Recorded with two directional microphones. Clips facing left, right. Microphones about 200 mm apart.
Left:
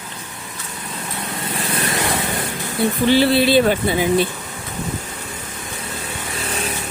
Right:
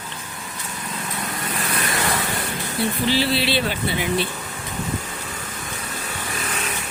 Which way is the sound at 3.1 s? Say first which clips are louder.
Left 10 dB; 55° left (ahead or behind).